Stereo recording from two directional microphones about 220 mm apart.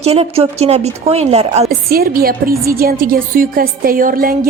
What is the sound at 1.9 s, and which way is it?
A woman's voice, 40° right (ahead or behind).